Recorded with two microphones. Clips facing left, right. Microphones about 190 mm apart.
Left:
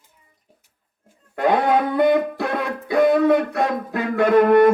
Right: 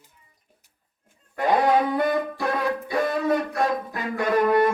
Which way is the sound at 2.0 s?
65° left (ahead or behind).